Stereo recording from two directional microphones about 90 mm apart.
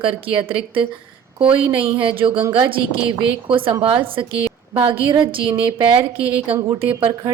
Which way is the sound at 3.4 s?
80° right.